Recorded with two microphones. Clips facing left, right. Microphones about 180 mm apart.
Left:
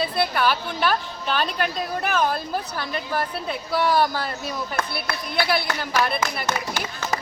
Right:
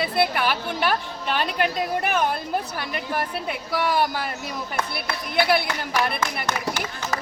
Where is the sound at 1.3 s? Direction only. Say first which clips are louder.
Right 2 dB; 20° right (ahead or behind).